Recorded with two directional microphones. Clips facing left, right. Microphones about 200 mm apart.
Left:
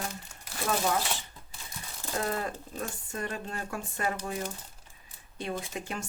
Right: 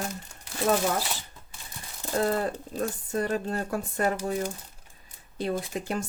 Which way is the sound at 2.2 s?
35° right (ahead or behind).